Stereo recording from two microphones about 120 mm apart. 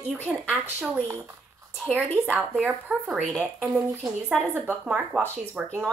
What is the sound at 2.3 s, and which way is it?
Speech, 15° right (ahead or behind).